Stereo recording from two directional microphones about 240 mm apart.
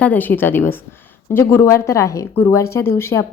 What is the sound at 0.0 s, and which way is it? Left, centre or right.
A woman's voice, centre.